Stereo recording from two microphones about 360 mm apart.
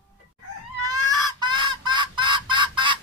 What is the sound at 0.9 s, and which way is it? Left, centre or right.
Fowl, right.